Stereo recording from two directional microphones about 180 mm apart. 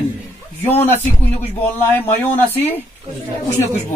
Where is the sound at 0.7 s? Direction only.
10° left (ahead or behind).